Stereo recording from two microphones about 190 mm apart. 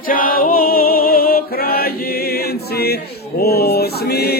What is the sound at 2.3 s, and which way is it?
Choir, 55° left (ahead or behind).